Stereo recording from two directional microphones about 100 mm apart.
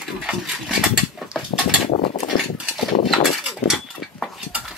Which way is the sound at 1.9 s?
55° left (ahead or behind).